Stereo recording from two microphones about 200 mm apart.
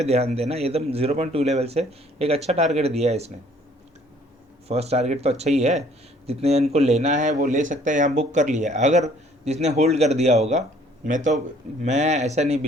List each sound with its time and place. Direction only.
0.0 s speech: 30° right (ahead or behind)
4.7 s speech: 30° right (ahead or behind)